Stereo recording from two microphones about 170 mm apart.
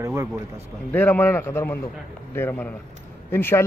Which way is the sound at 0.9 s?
10° left (ahead or behind).